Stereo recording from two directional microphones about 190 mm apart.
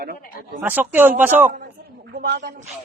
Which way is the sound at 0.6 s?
10° right (ahead or behind).